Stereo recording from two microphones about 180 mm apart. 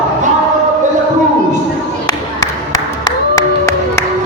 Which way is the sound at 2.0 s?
20° left (ahead or behind).